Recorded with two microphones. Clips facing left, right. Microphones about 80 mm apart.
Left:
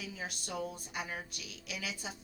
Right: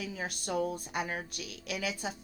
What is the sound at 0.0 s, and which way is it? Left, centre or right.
A woman's voice, right.